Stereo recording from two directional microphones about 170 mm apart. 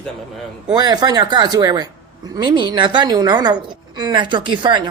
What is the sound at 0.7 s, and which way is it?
A woman's voice, 25° right (ahead or behind).